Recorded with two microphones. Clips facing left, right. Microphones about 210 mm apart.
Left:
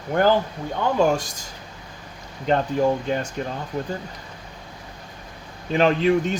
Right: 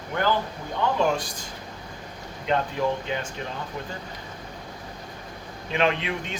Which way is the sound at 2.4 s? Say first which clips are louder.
Left 5 dB; 45° left (ahead or behind).